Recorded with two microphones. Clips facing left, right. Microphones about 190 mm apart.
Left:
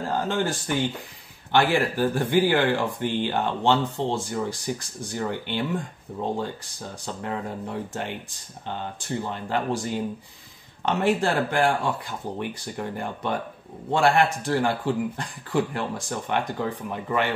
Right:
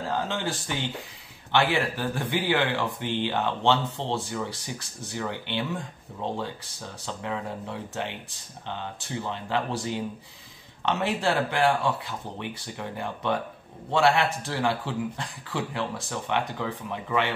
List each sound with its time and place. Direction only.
0.1 s speech: 50° left (ahead or behind)
7.1 s speech: 45° left (ahead or behind)
9.3 s speech: 45° left (ahead or behind)